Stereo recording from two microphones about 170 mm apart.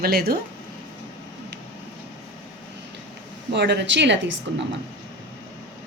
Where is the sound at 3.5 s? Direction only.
90° right.